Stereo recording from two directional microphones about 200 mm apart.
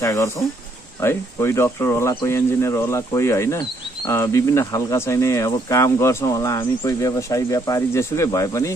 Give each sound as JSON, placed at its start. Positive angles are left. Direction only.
{"t": 0.0, "sound": "speech", "side_deg": 15}